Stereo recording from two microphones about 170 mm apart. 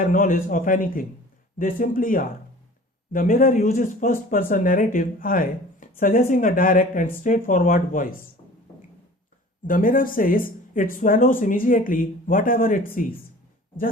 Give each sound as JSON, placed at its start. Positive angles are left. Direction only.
{"t": 0.0, "sound": "speech", "side_deg": 50}
{"t": 9.6, "sound": "speech", "side_deg": 55}